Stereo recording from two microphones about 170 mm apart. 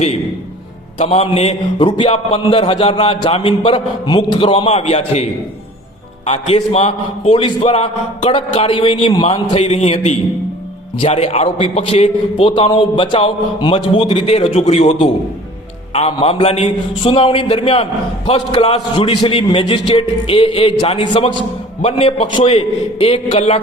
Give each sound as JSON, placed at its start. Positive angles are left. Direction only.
{"t": 0.9, "sound": "a man's voice", "side_deg": 35}
{"t": 21.8, "sound": "a man's voice", "side_deg": 40}